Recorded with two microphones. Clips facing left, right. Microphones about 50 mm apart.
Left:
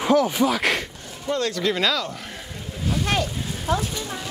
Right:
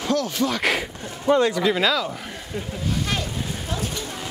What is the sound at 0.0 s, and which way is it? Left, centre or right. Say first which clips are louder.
Speech: left 4 dB; centre.